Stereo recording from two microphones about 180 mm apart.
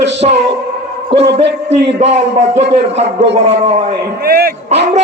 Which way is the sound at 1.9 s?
40° right (ahead or behind).